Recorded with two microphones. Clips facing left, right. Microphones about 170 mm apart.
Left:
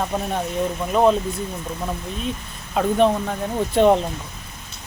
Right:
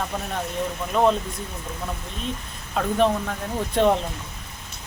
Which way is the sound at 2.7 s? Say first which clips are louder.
Left 3 dB; 10° left (ahead or behind).